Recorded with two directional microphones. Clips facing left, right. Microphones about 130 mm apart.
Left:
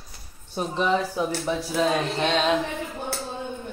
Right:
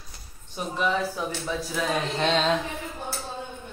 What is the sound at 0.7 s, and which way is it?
Speech, 20° left (ahead or behind).